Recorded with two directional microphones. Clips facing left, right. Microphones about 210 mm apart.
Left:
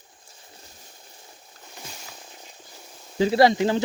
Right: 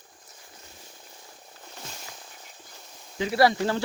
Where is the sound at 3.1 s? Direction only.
35° left (ahead or behind).